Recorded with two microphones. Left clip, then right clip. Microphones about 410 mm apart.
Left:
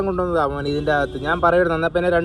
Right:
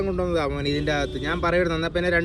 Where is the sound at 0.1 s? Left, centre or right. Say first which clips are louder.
Left 4 dB; left.